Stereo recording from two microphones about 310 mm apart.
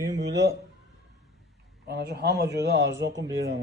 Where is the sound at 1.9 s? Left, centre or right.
Right.